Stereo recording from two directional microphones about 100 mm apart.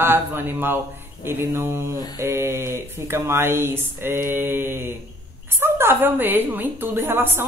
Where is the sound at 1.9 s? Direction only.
40° left (ahead or behind).